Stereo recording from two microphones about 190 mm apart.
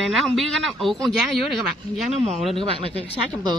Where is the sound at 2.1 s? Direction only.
35° right (ahead or behind).